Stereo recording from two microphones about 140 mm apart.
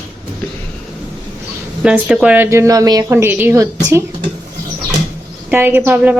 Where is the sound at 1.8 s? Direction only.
5° right (ahead or behind).